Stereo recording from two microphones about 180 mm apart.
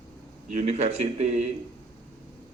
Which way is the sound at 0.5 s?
40° right (ahead or behind).